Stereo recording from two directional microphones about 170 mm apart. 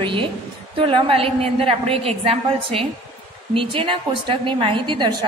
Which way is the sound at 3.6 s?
30° right (ahead or behind).